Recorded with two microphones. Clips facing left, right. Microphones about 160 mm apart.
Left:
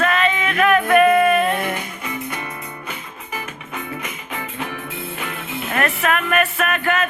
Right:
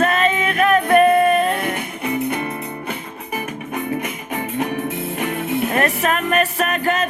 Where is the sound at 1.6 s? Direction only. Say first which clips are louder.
Right 3 dB; 60° right (ahead or behind).